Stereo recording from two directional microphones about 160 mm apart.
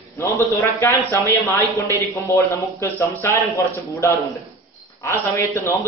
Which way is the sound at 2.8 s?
15° left (ahead or behind).